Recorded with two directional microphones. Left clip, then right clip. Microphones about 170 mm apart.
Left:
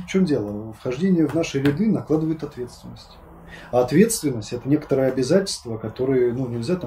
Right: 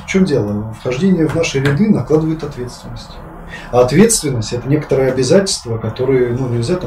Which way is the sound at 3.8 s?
15° right (ahead or behind).